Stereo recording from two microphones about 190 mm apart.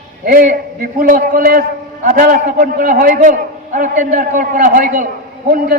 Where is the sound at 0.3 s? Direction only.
50° right (ahead or behind).